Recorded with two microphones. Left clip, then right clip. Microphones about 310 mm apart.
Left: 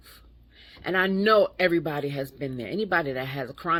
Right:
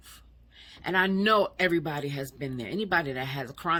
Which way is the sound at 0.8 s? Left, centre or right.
Right.